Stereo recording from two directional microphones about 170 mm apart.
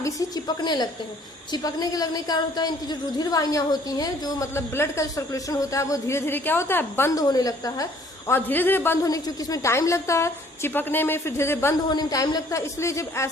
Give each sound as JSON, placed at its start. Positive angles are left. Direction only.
{"t": 0.0, "sound": "a woman's voice", "side_deg": 25}